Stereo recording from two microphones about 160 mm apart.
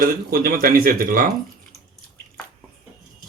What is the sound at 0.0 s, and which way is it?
Speech, 65° right (ahead or behind).